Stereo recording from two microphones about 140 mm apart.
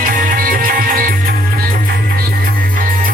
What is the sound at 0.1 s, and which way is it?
Music, 80° right.